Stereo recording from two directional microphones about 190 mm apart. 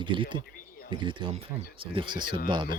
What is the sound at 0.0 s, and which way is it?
Speech, 25° right (ahead or behind).